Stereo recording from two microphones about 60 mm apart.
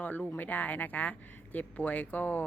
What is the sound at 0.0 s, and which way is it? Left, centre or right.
Speech, left.